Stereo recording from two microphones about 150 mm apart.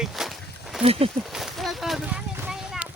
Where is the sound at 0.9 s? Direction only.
40° right (ahead or behind).